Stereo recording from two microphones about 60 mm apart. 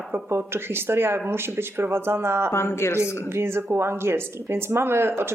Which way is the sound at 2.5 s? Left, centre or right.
Left.